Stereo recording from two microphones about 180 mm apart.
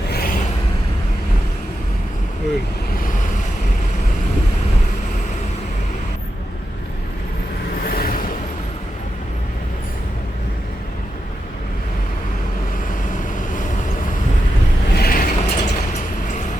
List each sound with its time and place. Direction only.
0.1 s a sound: 55° left (ahead or behind)
2.9 s vehicle: 50° left (ahead or behind)
7.9 s vehicle: 55° left (ahead or behind)
14.9 s mechanisms: 55° left (ahead or behind)